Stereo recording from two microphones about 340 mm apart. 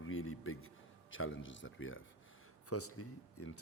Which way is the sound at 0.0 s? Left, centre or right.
Left.